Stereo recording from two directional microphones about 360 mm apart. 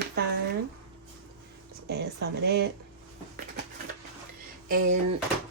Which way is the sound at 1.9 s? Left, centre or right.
Right.